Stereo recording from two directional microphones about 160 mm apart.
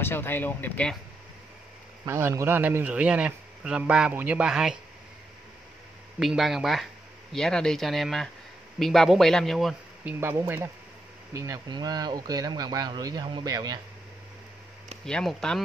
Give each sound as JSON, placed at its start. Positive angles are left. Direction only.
{"t": 0.0, "sound": "speech", "side_deg": 15}
{"t": 2.0, "sound": "speech", "side_deg": -15}
{"t": 6.1, "sound": "speech", "side_deg": 0}
{"t": 10.0, "sound": "speech", "side_deg": -15}
{"t": 15.0, "sound": "speech", "side_deg": 5}